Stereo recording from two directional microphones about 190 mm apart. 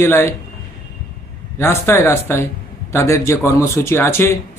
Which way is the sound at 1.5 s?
15° left (ahead or behind).